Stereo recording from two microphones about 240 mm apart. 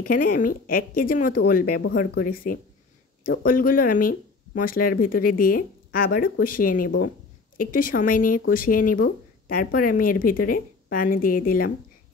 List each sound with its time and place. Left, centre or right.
0.0 s speech: left